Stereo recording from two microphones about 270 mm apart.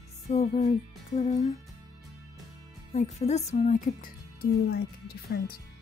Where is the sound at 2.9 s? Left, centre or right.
Left.